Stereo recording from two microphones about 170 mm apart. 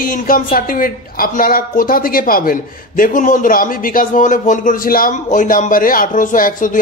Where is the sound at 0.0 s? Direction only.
55° left (ahead or behind).